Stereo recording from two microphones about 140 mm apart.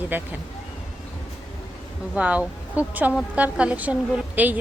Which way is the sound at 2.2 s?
10° right (ahead or behind).